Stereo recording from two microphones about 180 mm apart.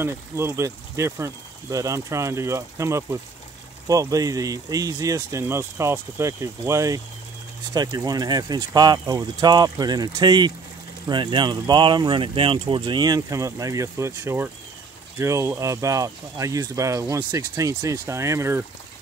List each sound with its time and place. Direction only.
0.0 s speech: 15° right (ahead or behind)